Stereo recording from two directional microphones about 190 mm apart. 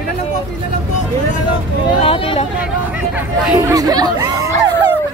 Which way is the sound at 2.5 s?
5° right (ahead or behind).